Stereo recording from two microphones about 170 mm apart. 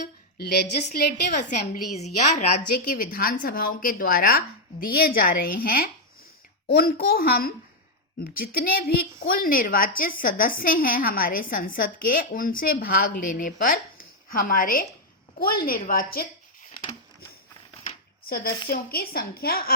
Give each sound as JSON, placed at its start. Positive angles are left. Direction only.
{"t": 0.0, "sound": "a sound", "side_deg": 70}
{"t": 1.3, "sound": "a woman's voice", "side_deg": 45}
{"t": 2.7, "sound": "speech", "side_deg": 60}
{"t": 18.3, "sound": "a woman's voice", "side_deg": 60}